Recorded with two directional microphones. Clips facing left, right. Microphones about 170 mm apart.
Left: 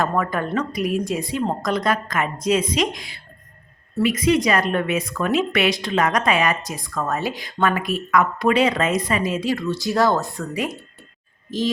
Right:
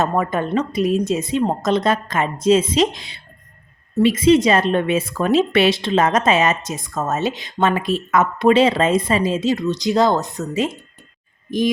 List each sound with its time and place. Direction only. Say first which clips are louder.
0.0 s speech: right 3 dB; 20° right (ahead or behind)